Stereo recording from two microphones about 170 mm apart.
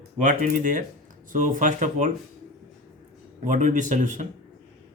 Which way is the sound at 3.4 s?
50° right (ahead or behind).